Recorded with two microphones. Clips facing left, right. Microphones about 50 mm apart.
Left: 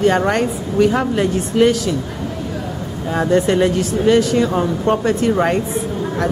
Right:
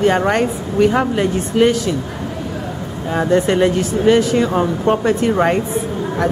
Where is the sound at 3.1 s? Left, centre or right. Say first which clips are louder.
Even; centre.